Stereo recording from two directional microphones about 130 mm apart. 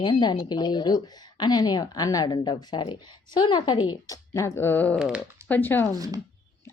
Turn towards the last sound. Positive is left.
turn(degrees=-30)  # may be behind; listen again after turning